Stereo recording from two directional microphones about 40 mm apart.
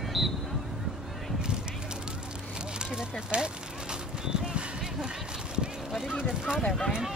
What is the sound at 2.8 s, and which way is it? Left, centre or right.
Speech, right.